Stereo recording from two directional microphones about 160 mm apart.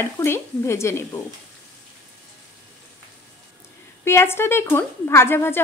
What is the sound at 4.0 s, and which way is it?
Speech, 15° left (ahead or behind).